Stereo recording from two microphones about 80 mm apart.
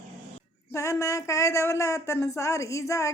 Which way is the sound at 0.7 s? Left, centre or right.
Left.